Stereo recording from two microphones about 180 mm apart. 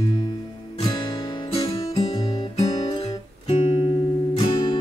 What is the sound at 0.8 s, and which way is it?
Music, 25° left (ahead or behind).